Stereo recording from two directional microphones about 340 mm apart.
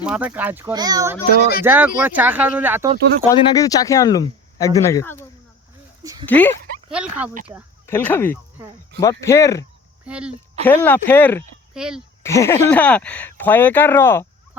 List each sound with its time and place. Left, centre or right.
0.0 s speech: centre
1.4 s speech: left
1.6 s speech: centre
3.2 s speech: centre
6.0 s speech: centre
6.2 s speech: centre
7.9 s speech: centre
10.1 s speech: centre